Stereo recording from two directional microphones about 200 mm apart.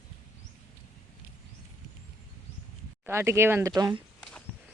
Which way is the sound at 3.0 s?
15° right (ahead or behind).